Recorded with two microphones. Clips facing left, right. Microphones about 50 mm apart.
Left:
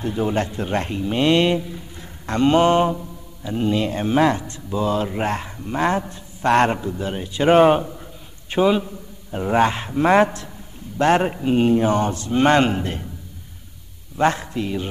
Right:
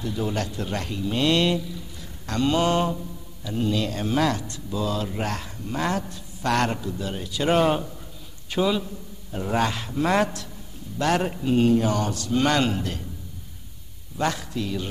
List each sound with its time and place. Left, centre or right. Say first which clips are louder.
0.0 s speech: left 5 dB; left
14.1 s speech: left 6 dB; left